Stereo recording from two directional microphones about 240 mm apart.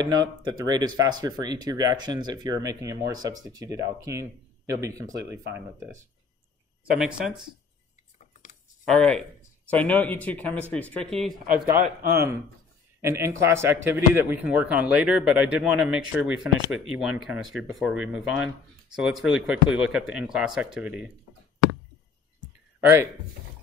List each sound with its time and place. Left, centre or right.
0.0 s speech: centre
8.2 s cutlery: left
8.8 s speech: centre